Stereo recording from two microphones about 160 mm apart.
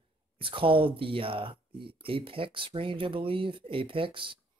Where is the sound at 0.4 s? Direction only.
35° right (ahead or behind).